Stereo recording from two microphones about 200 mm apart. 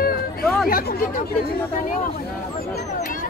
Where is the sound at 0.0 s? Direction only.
50° left (ahead or behind).